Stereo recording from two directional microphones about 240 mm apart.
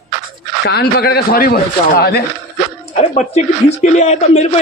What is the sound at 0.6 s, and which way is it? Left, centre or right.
A man's voice, left.